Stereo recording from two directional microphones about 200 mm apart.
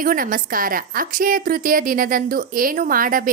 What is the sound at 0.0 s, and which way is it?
A woman's voice, 45° right (ahead or behind).